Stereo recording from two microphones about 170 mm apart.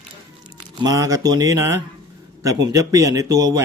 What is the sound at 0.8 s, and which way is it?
Speech, 20° right (ahead or behind).